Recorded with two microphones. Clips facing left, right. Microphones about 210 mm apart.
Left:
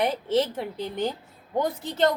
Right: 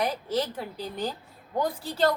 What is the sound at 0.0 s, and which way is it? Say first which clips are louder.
A woman's voice: left 4 dB; 25° left (ahead or behind).